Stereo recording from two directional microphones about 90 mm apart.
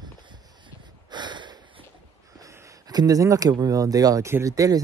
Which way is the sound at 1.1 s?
55° right (ahead or behind).